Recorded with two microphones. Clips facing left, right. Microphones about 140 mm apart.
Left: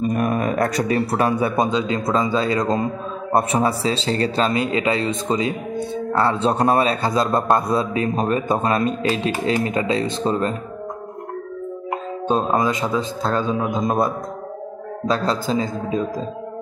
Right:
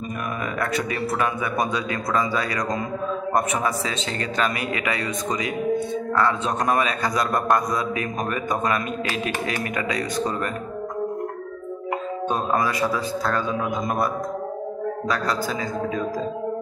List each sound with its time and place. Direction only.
0.1 s a man's voice: 40° left (ahead or behind)
1.6 s a man's voice: 25° left (ahead or behind)
12.3 s a man's voice: 25° left (ahead or behind)